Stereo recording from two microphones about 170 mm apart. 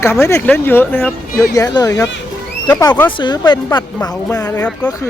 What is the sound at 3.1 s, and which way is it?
Speech, 30° left (ahead or behind).